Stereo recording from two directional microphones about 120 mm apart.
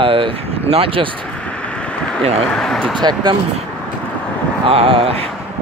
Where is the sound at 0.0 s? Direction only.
45° right (ahead or behind).